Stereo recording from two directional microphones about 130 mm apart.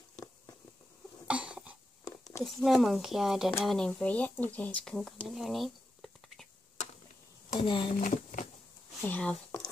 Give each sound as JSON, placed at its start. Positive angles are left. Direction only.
{"t": 1.2, "sound": "cough", "side_deg": -10}
{"t": 2.0, "sound": "a sound", "side_deg": 25}
{"t": 2.4, "sound": "speech", "side_deg": 0}
{"t": 7.6, "sound": "speech", "side_deg": 40}
{"t": 8.0, "sound": "a sound", "side_deg": 80}
{"t": 9.0, "sound": "speech", "side_deg": 10}